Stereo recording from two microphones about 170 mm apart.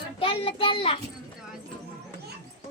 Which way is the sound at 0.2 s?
30° left (ahead or behind).